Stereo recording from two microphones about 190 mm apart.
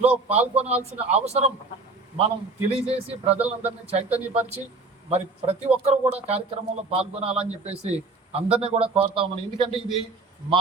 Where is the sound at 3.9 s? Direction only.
35° right (ahead or behind).